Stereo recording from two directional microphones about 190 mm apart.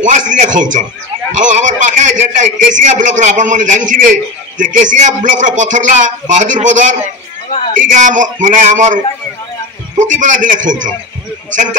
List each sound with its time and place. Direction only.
0.3 s a man's voice: 40° right (ahead or behind)